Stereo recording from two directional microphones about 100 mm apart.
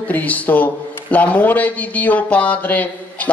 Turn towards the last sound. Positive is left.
turn(degrees=15)  # may be behind; listen again after turning